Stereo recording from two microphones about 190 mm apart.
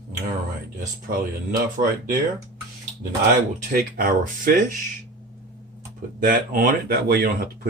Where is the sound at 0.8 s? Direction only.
45° right (ahead or behind).